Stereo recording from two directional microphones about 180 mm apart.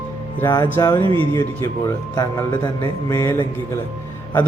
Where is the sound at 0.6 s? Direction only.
15° left (ahead or behind).